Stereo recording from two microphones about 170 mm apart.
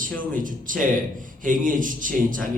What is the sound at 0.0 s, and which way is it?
Speech, 50° right (ahead or behind).